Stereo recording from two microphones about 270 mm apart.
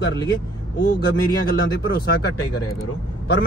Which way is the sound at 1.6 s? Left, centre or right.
Left.